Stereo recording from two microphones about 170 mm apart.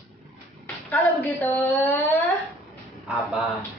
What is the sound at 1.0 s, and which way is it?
A woman's voice, 10° left (ahead or behind).